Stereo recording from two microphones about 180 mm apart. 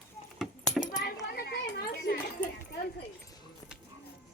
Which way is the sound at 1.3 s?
60° left (ahead or behind).